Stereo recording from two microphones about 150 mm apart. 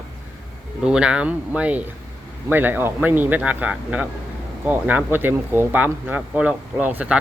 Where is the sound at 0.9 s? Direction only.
5° right (ahead or behind).